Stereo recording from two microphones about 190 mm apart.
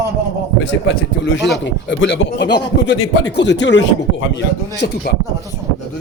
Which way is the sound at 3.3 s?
65° left (ahead or behind).